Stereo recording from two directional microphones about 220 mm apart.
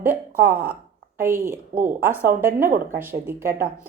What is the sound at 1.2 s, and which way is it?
A woman's voice, 10° right (ahead or behind).